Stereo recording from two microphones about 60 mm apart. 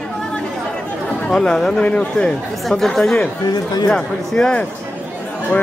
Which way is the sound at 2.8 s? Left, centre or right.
Centre.